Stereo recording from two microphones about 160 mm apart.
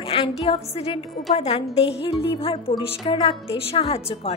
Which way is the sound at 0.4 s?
40° left (ahead or behind).